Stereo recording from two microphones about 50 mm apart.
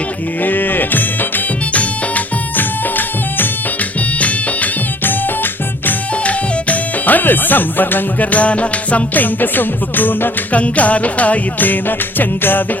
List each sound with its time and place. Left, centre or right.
0.4 s music: left
4.2 s music: left
5.0 s music: left
6.2 s speech: left
10.6 s music: left